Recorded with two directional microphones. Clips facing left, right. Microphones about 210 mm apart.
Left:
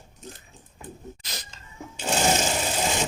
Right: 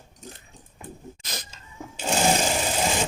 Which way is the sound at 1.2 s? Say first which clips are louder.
Right 3 dB; 50° right (ahead or behind).